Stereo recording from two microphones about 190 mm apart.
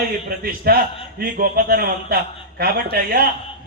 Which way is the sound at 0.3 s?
50° right (ahead or behind).